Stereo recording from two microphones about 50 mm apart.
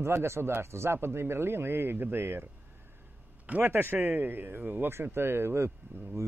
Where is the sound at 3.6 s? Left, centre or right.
Right.